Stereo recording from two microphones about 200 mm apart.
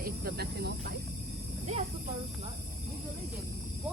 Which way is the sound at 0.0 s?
50° right (ahead or behind).